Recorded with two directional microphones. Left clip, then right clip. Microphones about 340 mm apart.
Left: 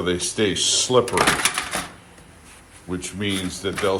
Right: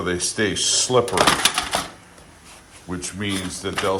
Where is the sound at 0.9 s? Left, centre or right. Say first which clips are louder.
Even; centre.